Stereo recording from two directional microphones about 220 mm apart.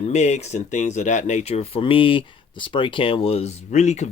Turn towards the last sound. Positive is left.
turn(degrees=30)  # may be behind; listen again after turning